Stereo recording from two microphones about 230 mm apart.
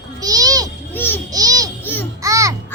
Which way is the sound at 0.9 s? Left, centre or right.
Centre.